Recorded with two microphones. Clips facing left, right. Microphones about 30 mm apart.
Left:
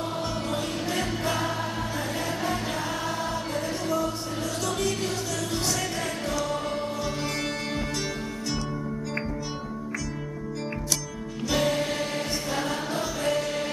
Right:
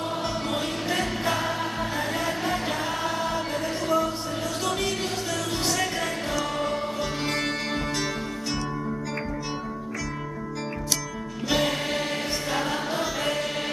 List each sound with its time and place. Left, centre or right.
0.9 s music: centre
3.8 s music: centre
11.4 s music: centre